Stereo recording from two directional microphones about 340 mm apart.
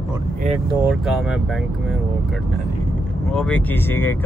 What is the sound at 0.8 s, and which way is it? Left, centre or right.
Speech, centre.